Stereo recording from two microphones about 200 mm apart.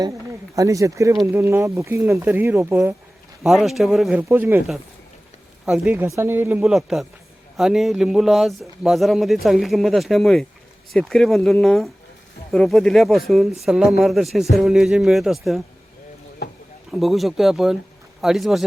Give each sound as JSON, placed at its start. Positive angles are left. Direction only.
{"t": 0.5, "sound": "speech", "side_deg": -15}
{"t": 3.4, "sound": "a man's voice", "side_deg": 0}
{"t": 16.9, "sound": "a man's voice", "side_deg": 0}